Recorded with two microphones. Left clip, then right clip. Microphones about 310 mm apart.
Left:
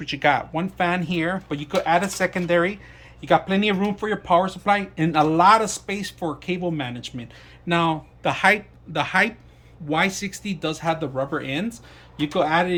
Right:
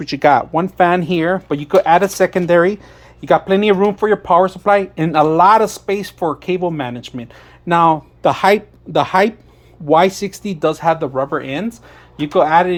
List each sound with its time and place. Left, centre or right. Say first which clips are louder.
0.0 s speech: right 8 dB; centre